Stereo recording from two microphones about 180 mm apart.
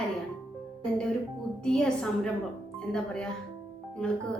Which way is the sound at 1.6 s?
5° left (ahead or behind).